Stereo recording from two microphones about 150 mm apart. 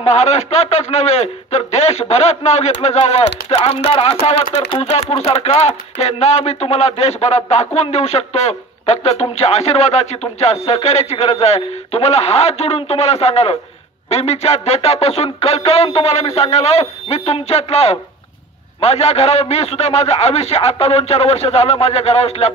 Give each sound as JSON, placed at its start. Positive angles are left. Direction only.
{"t": 0.0, "sound": "a man's voice", "side_deg": 45}